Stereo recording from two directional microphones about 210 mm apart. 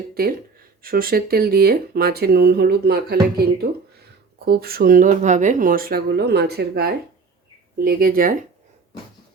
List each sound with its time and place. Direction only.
0.1 s speech: 45° right (ahead or behind)